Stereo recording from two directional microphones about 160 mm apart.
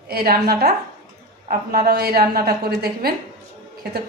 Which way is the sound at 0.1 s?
70° right (ahead or behind).